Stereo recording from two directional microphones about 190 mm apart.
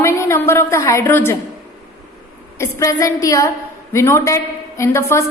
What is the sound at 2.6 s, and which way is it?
A woman's voice, 15° left (ahead or behind).